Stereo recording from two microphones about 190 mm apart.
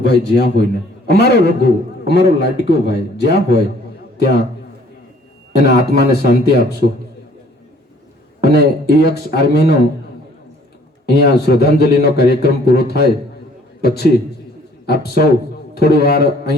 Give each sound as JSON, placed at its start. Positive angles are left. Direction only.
{"t": 0.0, "sound": "a man's voice", "side_deg": 60}
{"t": 5.5, "sound": "a man's voice", "side_deg": 60}
{"t": 8.4, "sound": "a man's voice", "side_deg": 60}
{"t": 11.0, "sound": "a man's voice", "side_deg": 60}